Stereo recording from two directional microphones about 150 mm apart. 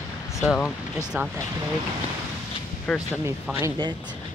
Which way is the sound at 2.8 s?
5° left (ahead or behind).